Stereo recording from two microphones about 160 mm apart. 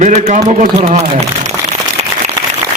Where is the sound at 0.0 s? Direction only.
45° right (ahead or behind).